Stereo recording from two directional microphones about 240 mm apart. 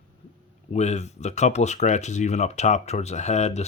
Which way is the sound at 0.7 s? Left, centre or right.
Left.